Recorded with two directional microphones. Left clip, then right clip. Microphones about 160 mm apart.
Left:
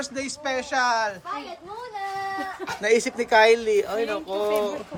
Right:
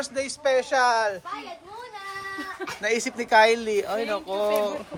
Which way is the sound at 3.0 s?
25° left (ahead or behind).